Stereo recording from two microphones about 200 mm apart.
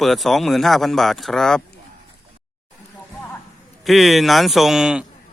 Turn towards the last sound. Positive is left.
turn(degrees=-5)  # may be behind; listen again after turning